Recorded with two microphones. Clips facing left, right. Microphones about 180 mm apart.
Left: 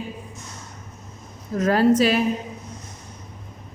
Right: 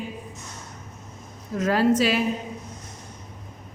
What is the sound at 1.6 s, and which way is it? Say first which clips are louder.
Speech: left 3 dB; 45° left (ahead or behind).